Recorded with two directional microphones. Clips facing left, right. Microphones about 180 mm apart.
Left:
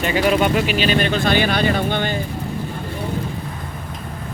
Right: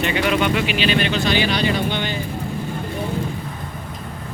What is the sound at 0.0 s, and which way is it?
Speech, 35° left (ahead or behind).